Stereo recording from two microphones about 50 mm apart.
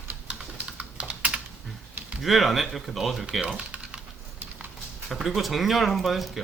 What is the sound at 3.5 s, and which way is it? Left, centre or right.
Typing, right.